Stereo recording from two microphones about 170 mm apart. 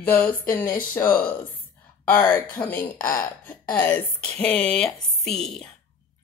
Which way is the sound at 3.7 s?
10° left (ahead or behind).